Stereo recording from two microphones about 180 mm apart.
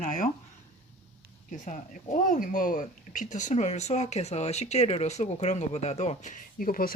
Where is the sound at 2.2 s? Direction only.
50° left (ahead or behind).